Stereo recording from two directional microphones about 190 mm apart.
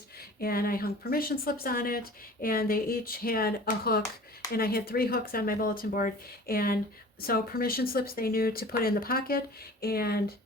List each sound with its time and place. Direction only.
0.3 s speech: 50° left (ahead or behind)